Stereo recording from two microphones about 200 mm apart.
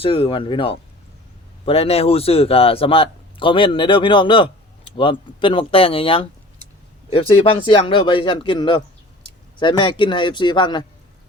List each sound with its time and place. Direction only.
0.0 s a man's voice: 25° left (ahead or behind)